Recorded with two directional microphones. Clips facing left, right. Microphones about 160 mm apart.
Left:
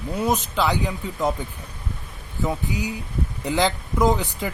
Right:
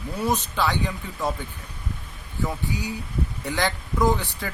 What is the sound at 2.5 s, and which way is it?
Speech, 20° left (ahead or behind).